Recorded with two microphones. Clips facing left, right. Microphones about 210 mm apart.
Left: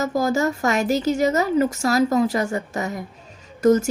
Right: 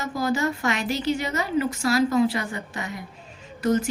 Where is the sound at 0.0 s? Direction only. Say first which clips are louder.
Left 4 dB; 45° left (ahead or behind).